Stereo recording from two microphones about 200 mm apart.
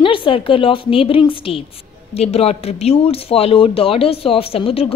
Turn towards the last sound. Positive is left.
turn(degrees=30)  # may be behind; listen again after turning